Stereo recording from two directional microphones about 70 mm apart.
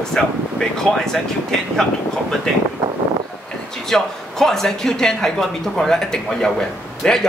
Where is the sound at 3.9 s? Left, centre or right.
Centre.